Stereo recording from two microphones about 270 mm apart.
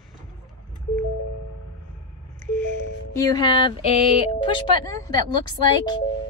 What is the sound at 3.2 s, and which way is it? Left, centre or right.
Speech, centre.